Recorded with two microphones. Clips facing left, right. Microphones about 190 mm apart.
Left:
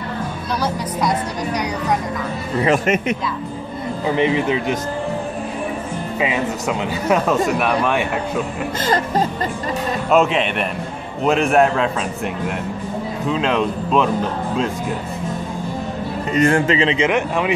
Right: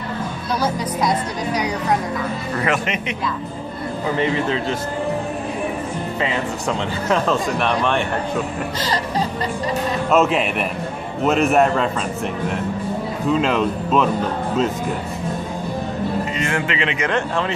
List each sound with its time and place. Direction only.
0.6 s speech: 10° right (ahead or behind)
4.2 s speech: 15° left (ahead or behind)
6.1 s speech: 10° left (ahead or behind)
8.8 s speech: 50° left (ahead or behind)
10.1 s speech: centre (ahead or behind)
13.3 s speech: 5° right (ahead or behind)
16.3 s a man's voice: 35° left (ahead or behind)
17.1 s speech: 15° left (ahead or behind)